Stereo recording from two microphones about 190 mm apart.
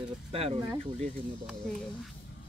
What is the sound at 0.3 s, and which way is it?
Speech, 30° right (ahead or behind).